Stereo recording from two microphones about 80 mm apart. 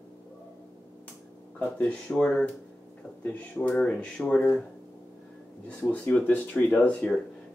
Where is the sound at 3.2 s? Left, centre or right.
Left.